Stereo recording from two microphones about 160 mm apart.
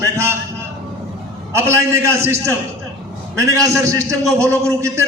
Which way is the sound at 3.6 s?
20° right (ahead or behind).